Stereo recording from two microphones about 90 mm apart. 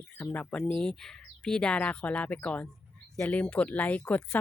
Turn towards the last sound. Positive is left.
turn(degrees=15)  # may be behind; listen again after turning